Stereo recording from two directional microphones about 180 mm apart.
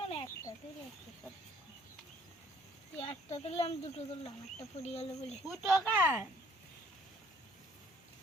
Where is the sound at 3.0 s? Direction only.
30° left (ahead or behind).